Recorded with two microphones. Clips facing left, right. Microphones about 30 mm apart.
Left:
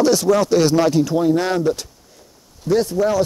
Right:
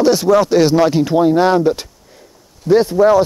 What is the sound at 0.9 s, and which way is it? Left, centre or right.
Speech, right.